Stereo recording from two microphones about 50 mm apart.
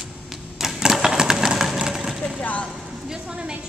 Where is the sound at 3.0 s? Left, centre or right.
Centre.